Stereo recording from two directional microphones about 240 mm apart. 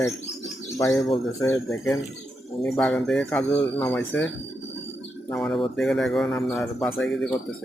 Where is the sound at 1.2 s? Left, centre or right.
Centre.